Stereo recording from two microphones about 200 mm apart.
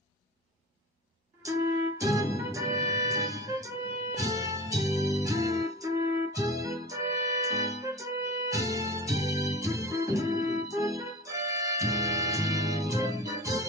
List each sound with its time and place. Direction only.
1.4 s music: 15° right (ahead or behind)